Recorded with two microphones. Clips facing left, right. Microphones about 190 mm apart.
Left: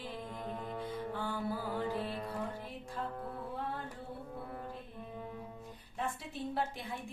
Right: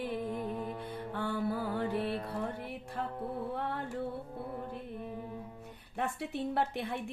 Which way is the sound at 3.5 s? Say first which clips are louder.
Right 4 dB; 65° right (ahead or behind).